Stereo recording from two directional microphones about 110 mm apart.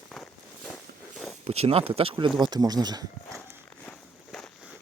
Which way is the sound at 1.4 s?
65° right (ahead or behind).